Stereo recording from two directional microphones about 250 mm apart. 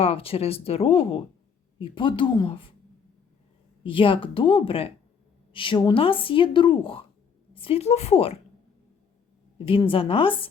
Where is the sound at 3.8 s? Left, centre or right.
Left.